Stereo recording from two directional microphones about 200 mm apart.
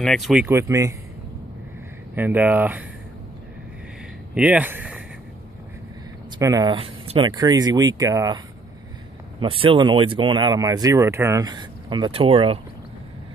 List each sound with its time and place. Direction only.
0.0 s speech: centre (ahead or behind)
2.1 s speech: 10° right (ahead or behind)
4.4 s speech: 5° right (ahead or behind)
6.3 s speech: 20° right (ahead or behind)
9.4 s speech: 25° right (ahead or behind)